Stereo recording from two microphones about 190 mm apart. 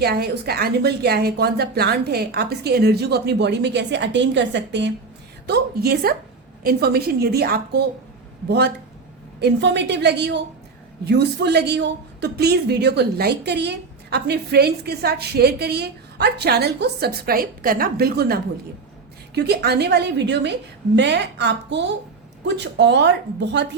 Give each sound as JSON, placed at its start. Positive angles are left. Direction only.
{"t": 0.0, "sound": "a woman's voice", "side_deg": -55}
{"t": 5.5, "sound": "a woman's voice", "side_deg": -55}